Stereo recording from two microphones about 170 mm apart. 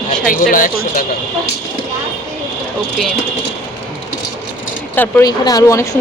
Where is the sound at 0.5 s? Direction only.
55° left (ahead or behind).